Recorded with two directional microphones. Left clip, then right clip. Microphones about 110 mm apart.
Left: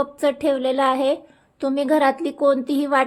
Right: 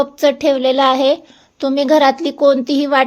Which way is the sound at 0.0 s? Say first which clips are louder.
Right 7 dB; 25° right (ahead or behind).